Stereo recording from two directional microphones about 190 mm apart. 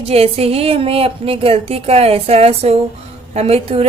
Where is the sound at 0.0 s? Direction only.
30° right (ahead or behind).